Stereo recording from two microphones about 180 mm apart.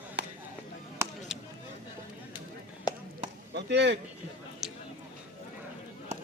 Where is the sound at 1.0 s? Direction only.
15° right (ahead or behind).